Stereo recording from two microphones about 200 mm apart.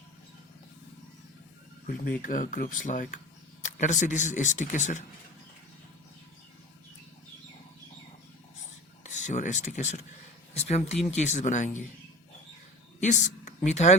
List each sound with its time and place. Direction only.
2.2 s speech: 40° left (ahead or behind)
9.0 s speech: 35° left (ahead or behind)
13.0 s a woman's voice: 35° left (ahead or behind)